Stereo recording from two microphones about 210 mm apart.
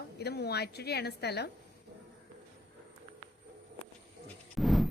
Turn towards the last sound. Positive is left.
turn(degrees=0)  # may be behind; listen again after turning